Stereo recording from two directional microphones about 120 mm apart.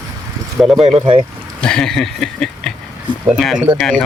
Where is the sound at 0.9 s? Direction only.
50° right (ahead or behind).